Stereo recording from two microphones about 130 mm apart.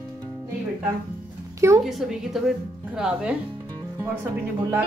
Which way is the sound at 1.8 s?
5° right (ahead or behind).